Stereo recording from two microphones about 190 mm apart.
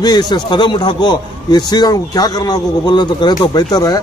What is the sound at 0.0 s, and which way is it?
A man's voice, 20° left (ahead or behind).